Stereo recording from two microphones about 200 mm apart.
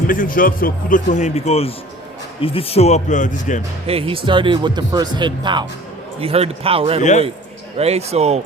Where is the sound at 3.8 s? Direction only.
30° right (ahead or behind).